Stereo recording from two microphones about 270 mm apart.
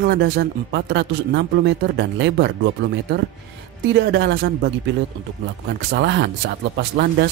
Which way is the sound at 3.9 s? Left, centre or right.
Right.